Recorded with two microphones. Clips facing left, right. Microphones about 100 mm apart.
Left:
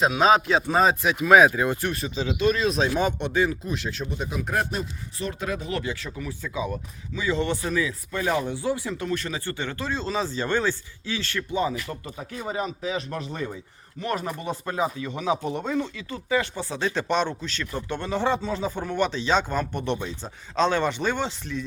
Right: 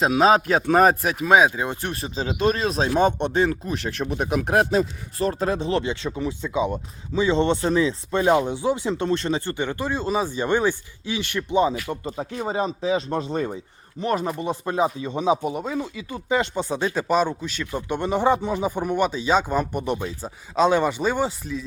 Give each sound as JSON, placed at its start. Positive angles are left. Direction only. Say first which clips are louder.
{"t": 0.0, "sound": "speech", "louder": "right 2 dB", "side_deg": -35}
{"t": 1.3, "sound": "speech", "louder": "left 1 dB", "side_deg": -20}
{"t": 3.5, "sound": "speech", "louder": "right 3 dB", "side_deg": -50}
{"t": 5.1, "sound": "speech", "louder": "right 7 dB", "side_deg": -40}
{"t": 15.5, "sound": "speech", "louder": "even", "side_deg": -5}